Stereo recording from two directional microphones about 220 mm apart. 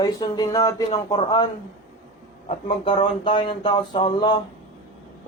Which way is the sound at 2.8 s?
25° left (ahead or behind).